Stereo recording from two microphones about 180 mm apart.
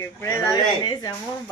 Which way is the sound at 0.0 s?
15° left (ahead or behind).